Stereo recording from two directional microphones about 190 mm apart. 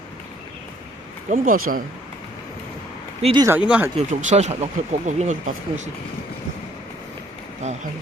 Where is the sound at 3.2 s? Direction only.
30° right (ahead or behind).